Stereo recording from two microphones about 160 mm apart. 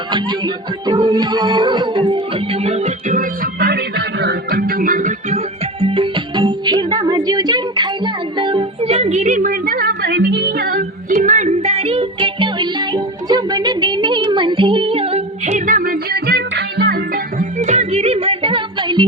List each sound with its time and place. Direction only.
0.1 s music: 25° right (ahead or behind); by 5.4 s 55° right (ahead or behind)
5.8 s music: 30° right (ahead or behind); by 10.8 s 70° right (ahead or behind)
11.1 s music: 50° right (ahead or behind); by 17.0 s 90° right
17.3 s music: 45° right (ahead or behind); by 19.0 s 30° right (ahead or behind)